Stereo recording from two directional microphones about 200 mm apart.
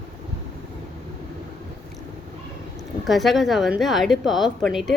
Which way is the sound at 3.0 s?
Centre (ahead or behind).